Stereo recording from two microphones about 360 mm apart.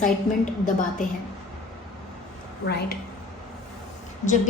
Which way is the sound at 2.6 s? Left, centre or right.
Left.